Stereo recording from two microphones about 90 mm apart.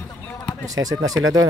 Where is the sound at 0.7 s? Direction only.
40° right (ahead or behind).